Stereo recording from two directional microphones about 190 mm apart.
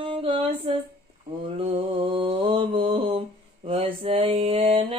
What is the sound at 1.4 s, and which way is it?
Mantra, 30° right (ahead or behind).